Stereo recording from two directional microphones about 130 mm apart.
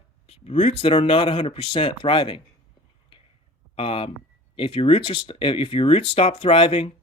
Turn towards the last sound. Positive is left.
turn(degrees=45)  # may be behind; listen again after turning